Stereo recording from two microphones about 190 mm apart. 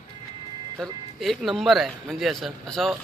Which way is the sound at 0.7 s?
Centre (ahead or behind).